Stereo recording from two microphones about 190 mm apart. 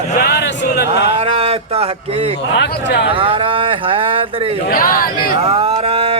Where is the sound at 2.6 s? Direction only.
65° left (ahead or behind).